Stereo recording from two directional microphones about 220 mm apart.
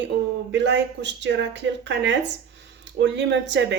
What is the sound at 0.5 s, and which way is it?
Speech, 50° right (ahead or behind).